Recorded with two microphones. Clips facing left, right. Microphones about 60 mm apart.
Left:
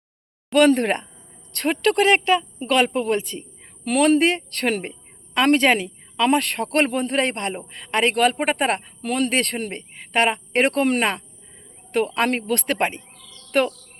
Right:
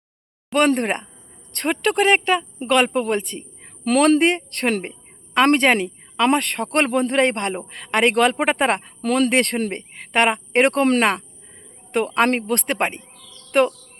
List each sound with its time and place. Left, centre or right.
0.6 s a woman's voice: right
3.8 s speech: right
4.2 s a woman's voice: right
7.0 s a woman's voice: right
9.0 s speech: right
11.9 s a woman's voice: right
12.4 s speech: right